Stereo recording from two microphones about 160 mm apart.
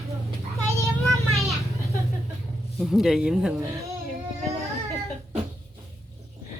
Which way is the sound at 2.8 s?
Centre (ahead or behind).